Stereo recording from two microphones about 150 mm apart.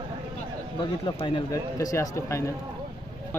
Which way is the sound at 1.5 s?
20° left (ahead or behind).